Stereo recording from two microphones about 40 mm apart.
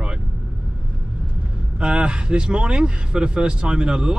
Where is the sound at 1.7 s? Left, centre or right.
Right.